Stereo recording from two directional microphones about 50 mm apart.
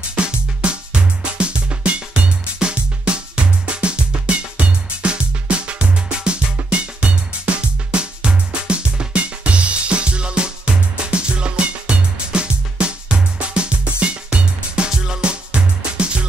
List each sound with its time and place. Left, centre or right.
0.1 s music: right